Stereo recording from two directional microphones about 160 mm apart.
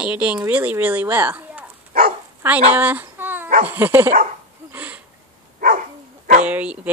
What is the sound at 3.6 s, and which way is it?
Speech, 10° right (ahead or behind).